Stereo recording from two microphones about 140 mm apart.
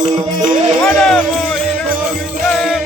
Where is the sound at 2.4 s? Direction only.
Centre (ahead or behind).